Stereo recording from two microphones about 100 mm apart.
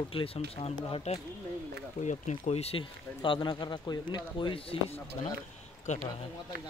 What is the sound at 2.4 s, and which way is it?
Speech, 90° left.